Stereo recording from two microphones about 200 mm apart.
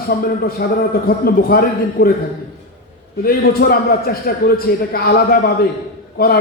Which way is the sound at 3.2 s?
50° left (ahead or behind).